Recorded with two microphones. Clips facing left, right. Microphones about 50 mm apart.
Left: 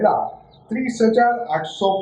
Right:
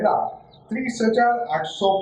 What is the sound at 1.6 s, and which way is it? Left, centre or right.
Speech, centre.